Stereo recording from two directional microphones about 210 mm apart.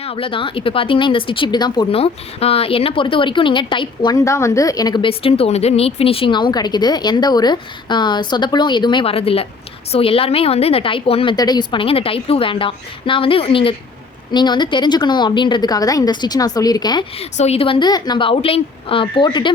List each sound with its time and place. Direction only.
0.0 s speech: 25° left (ahead or behind)